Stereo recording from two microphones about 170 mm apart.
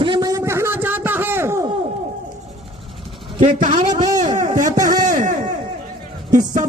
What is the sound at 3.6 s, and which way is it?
Speech, 50° right (ahead or behind).